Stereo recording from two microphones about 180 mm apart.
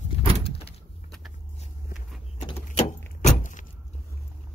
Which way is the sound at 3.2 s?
45° left (ahead or behind).